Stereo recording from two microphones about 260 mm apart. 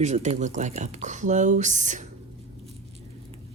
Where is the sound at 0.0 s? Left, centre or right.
Right.